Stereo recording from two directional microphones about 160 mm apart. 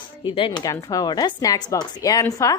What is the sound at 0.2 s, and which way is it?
Speech, 35° left (ahead or behind).